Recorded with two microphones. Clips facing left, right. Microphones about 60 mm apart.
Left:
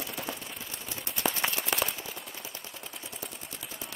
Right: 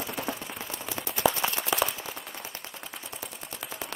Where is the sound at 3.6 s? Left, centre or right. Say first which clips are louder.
Right 7 dB; right.